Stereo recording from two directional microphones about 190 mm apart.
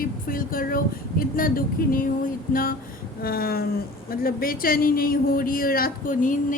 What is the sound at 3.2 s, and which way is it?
A woman's voice, 50° left (ahead or behind).